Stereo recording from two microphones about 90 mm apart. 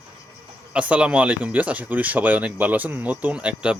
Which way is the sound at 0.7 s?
15° right (ahead or behind).